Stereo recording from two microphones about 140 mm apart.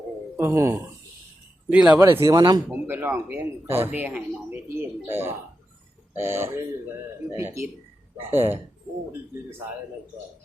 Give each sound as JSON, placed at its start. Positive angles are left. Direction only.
{"t": 0.3, "sound": "speech", "side_deg": -20}
{"t": 2.6, "sound": "speech", "side_deg": -15}